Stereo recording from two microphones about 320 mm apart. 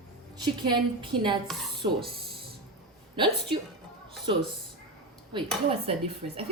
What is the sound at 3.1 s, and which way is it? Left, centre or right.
Speech, centre.